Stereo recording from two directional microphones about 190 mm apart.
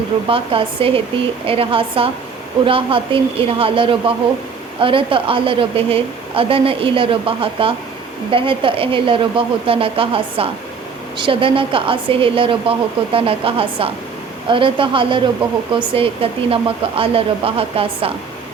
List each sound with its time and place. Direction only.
0.3 s a woman's voice: 30° right (ahead or behind)